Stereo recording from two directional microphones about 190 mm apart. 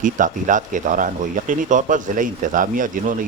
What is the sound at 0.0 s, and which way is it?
Speech, 45° right (ahead or behind).